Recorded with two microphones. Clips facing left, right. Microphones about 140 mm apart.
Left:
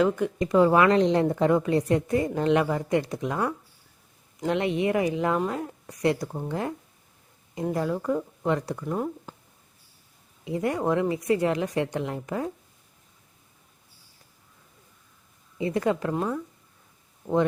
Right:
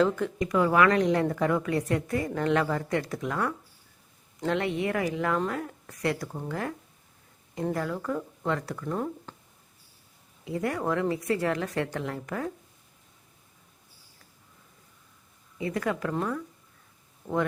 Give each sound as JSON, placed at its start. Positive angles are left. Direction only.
{"t": 0.3, "sound": "a woman's voice", "side_deg": 25}
{"t": 10.4, "sound": "a woman's voice", "side_deg": 20}
{"t": 15.5, "sound": "a woman's voice", "side_deg": 25}
{"t": 17.2, "sound": "speech", "side_deg": 10}